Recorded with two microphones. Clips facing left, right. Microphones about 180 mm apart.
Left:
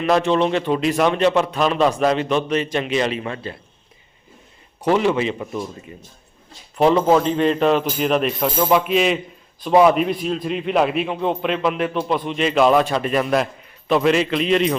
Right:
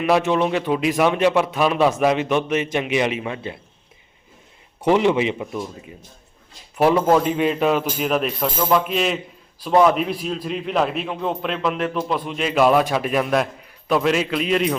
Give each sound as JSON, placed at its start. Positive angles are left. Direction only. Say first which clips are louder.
{"t": 0.0, "sound": "a man's voice", "louder": "left 1 dB", "side_deg": -10}
{"t": 4.9, "sound": "a man's voice", "louder": "right 1 dB", "side_deg": -15}
{"t": 5.5, "sound": "a man's voice", "louder": "left 1 dB", "side_deg": 0}
{"t": 7.2, "sound": "a man's voice", "louder": "left 2 dB", "side_deg": -10}